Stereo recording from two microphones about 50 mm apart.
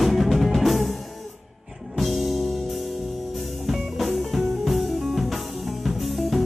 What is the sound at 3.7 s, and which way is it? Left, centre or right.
Music, centre.